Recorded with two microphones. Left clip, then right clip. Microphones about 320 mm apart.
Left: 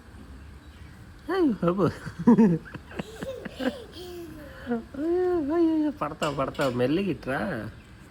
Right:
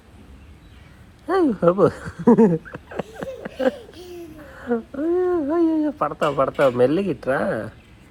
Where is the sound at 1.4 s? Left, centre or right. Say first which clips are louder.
Right 10 dB; right.